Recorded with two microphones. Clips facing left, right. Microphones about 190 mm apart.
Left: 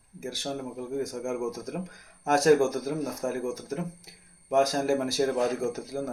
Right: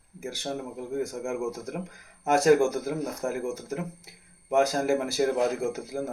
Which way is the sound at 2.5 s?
10° right (ahead or behind).